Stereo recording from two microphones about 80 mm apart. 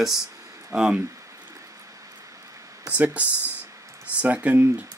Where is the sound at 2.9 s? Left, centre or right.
Centre.